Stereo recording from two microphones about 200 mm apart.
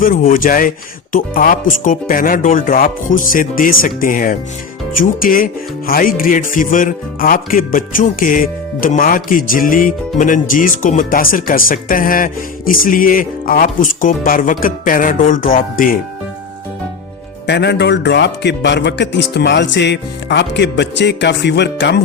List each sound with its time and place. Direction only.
0.0 s speech: 45° left (ahead or behind)
17.4 s a man's voice: 60° left (ahead or behind)